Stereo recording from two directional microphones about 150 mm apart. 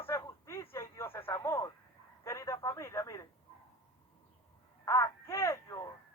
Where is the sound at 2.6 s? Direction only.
20° left (ahead or behind).